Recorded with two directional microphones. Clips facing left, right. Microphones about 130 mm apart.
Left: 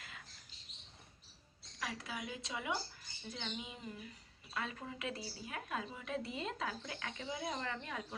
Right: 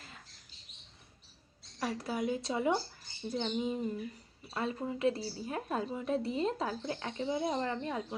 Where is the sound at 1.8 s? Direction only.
40° right (ahead or behind).